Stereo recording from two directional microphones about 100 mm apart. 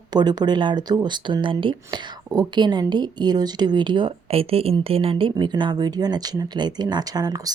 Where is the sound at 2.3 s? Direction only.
50° right (ahead or behind).